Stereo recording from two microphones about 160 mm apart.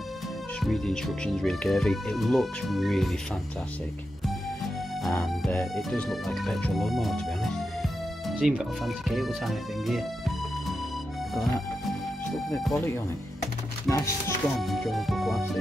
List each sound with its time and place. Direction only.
0.6 s speech: centre (ahead or behind)
5.0 s music: centre (ahead or behind)
12.3 s music: centre (ahead or behind)
13.4 s music: 20° left (ahead or behind)
14.6 s speech: centre (ahead or behind)